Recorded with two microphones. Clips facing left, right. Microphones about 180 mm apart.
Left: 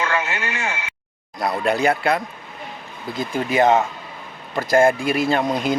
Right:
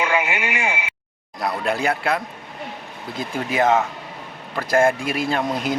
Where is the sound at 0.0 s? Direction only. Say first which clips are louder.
Right 2 dB; 15° right (ahead or behind).